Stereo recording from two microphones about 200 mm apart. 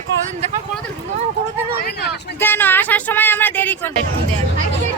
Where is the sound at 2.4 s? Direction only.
10° left (ahead or behind).